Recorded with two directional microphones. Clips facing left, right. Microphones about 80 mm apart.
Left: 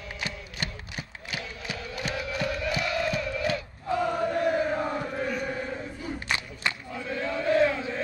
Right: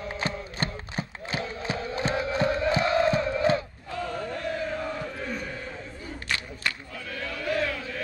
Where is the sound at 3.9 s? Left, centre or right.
Centre.